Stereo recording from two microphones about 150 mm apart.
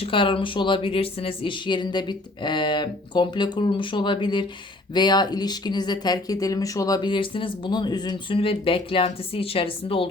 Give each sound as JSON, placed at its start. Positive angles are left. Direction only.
{"t": 0.0, "sound": "speech", "side_deg": 35}